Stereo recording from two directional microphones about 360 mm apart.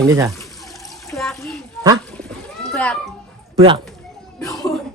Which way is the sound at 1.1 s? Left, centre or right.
Centre.